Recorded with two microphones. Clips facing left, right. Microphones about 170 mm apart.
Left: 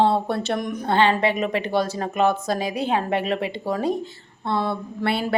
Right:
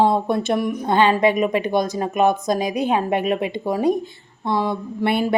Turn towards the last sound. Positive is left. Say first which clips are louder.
# right 3 dB
turn(degrees=-20)  # may be behind; listen again after turning